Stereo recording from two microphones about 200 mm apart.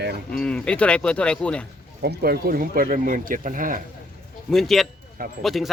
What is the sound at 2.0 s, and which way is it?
Speech, 55° right (ahead or behind).